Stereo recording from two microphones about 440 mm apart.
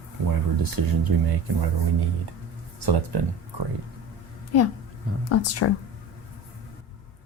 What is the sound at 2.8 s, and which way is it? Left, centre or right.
Speech, right.